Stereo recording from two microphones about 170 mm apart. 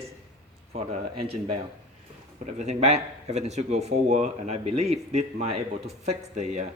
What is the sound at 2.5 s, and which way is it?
Speech, 40° right (ahead or behind).